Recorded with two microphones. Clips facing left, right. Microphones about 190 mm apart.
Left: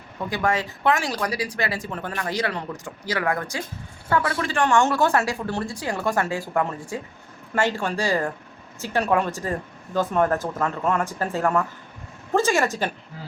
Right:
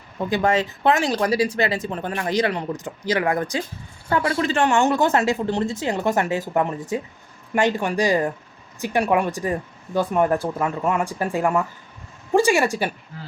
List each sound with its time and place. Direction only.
0.3 s speech: 25° right (ahead or behind)